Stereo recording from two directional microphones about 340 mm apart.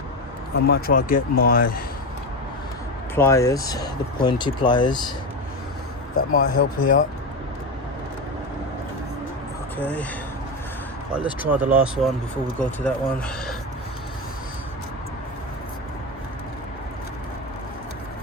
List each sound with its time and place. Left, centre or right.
0.9 s speech: left
3.2 s speech: centre
6.1 s speech: left
9.7 s speech: centre
11.1 s speech: centre